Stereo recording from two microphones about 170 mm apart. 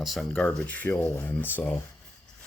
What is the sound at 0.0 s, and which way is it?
Speech, centre (ahead or behind).